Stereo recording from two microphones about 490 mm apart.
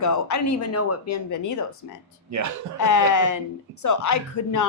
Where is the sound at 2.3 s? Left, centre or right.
Right.